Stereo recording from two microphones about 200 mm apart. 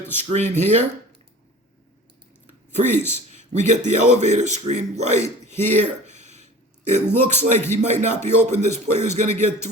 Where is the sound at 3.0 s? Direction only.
35° right (ahead or behind).